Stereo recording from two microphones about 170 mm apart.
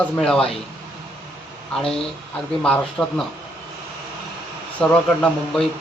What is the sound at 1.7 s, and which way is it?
Speech, 5° left (ahead or behind).